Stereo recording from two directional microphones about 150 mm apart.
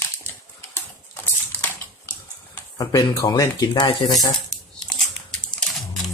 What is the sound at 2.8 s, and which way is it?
Speech, 25° left (ahead or behind).